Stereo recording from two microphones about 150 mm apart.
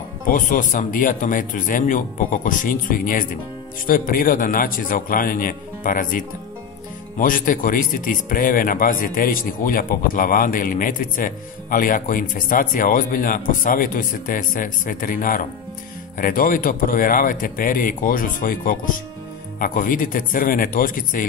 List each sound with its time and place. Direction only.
0.2 s speech: 60° left (ahead or behind)